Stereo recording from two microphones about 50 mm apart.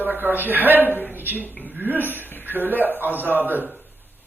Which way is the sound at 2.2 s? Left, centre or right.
Left.